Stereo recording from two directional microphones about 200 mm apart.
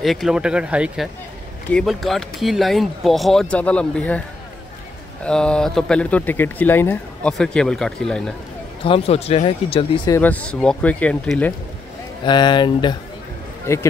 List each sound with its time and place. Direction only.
0.0 s speech: centre (ahead or behind)
5.2 s speech: 5° left (ahead or behind)
8.8 s speech: 30° left (ahead or behind)
10.1 s speech: 10° left (ahead or behind)
12.3 s speech: 20° left (ahead or behind)